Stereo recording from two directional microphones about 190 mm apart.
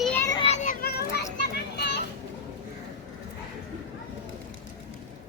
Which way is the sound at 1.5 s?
60° left (ahead or behind).